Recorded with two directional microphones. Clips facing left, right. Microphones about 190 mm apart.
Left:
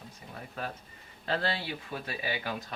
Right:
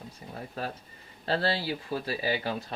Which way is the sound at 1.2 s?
30° right (ahead or behind).